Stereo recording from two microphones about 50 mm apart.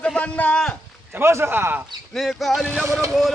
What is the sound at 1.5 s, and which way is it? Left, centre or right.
Speech, right.